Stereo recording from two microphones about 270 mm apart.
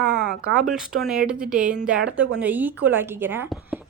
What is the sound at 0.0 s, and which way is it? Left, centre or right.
Speech, centre.